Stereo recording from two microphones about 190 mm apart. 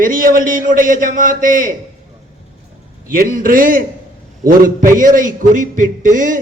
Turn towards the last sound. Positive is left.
turn(degrees=-45)  # may be behind; listen again after turning